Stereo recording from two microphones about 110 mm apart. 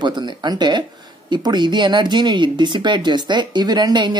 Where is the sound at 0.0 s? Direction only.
45° right (ahead or behind).